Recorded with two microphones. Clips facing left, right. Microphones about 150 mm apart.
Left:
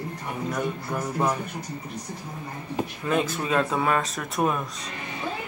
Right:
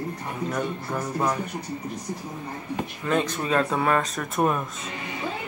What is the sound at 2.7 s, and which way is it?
Speech, 5° left (ahead or behind).